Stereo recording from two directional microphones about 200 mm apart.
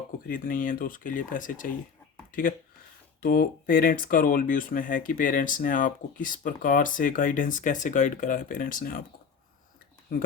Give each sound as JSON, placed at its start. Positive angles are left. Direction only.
{"t": 0.3, "sound": "speech", "side_deg": 45}